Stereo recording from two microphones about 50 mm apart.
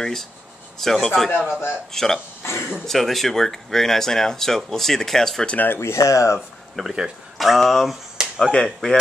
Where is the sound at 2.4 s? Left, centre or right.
Left.